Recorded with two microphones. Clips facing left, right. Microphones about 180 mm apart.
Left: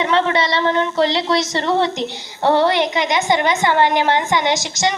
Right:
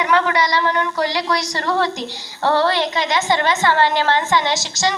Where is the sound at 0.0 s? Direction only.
25° left (ahead or behind).